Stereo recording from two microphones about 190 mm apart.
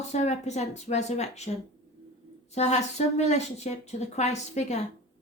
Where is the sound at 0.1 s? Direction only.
35° left (ahead or behind).